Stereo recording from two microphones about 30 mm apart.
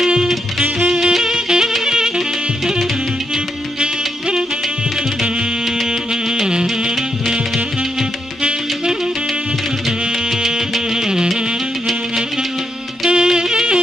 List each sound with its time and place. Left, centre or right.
0.8 s saxophone: centre
1.9 s music: right
3.8 s music: right
5.9 s music: right
9.8 s music: centre
13.1 s music: right